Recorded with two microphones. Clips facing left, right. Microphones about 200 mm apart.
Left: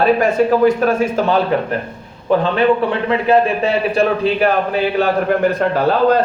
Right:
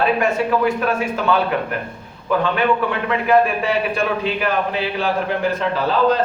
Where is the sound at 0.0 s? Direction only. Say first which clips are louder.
Left 5 dB; 40° left (ahead or behind).